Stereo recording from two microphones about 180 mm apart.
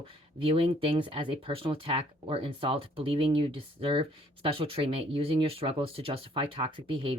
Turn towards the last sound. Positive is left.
turn(degrees=-30)  # may be behind; listen again after turning